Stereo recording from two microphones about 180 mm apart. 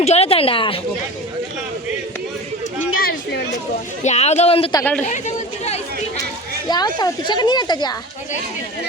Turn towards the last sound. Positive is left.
turn(degrees=25)  # may be behind; listen again after turning